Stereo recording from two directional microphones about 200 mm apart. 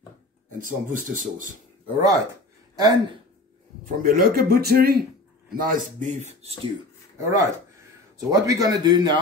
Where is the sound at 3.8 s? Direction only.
45° right (ahead or behind).